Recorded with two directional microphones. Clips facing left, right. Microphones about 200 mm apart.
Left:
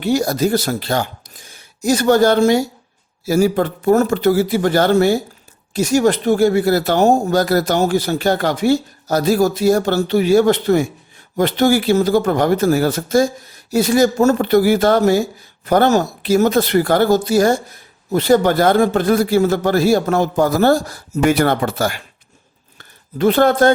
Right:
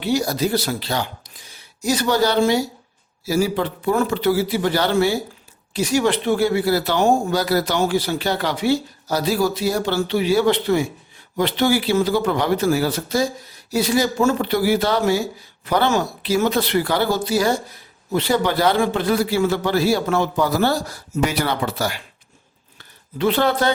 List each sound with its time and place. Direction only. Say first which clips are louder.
0.0 s speech: left 4 dB; 45° left (ahead or behind)